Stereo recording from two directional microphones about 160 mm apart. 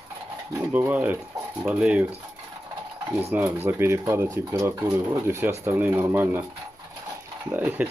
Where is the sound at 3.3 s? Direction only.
15° right (ahead or behind).